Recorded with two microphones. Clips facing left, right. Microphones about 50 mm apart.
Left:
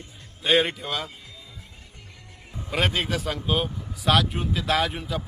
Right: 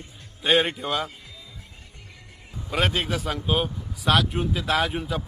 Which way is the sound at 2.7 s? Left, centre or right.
Centre.